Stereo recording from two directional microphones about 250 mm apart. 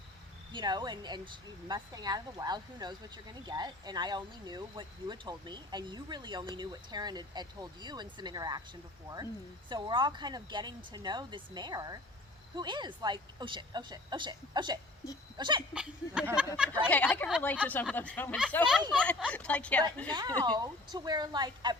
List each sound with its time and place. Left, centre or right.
0.5 s speech: centre
15.7 s a woman's voice: centre
20.1 s speech: centre